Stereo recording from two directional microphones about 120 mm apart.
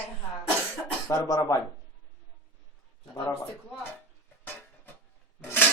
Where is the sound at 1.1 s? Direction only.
30° left (ahead or behind).